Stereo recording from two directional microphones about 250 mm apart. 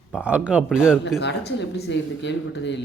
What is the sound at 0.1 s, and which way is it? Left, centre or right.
Speech, centre.